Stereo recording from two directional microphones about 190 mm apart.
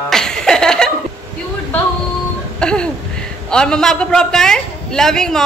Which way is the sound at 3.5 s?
5° left (ahead or behind).